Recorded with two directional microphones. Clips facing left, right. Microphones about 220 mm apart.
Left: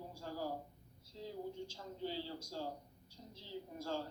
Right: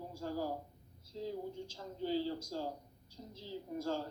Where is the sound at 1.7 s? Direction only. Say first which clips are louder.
Right 5 dB; 45° right (ahead or behind).